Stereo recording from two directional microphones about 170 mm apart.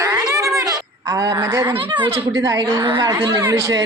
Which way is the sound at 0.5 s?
20° right (ahead or behind).